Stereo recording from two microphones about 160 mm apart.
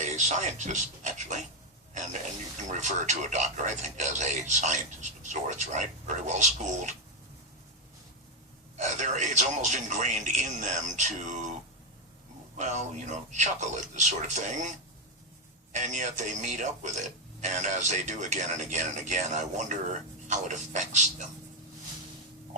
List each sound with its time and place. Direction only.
0.0 s a man's voice: 50° right (ahead or behind)
8.8 s speech: 50° right (ahead or behind)
12.5 s speech: 50° right (ahead or behind)